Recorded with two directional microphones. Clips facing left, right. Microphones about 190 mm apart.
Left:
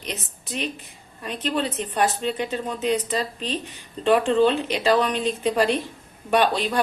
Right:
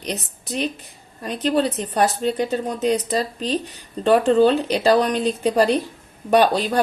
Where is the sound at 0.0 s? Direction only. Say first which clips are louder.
Right 5 dB; 35° right (ahead or behind).